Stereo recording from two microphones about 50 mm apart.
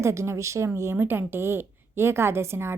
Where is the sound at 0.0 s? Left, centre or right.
Right.